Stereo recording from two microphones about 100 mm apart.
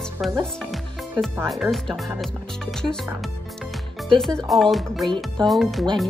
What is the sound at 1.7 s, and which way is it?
Speech, centre (ahead or behind).